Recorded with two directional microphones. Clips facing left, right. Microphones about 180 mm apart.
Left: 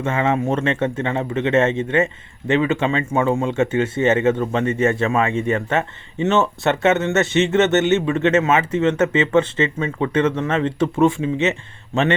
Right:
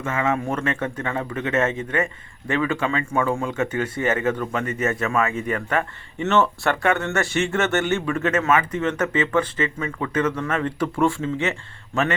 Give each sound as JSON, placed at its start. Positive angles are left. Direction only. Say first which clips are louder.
{"t": 0.0, "sound": "speech", "louder": "left 4 dB", "side_deg": 30}